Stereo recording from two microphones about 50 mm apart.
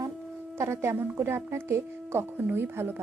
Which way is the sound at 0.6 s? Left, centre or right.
Right.